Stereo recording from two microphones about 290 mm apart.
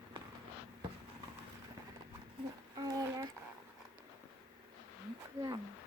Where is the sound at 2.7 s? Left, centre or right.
Centre.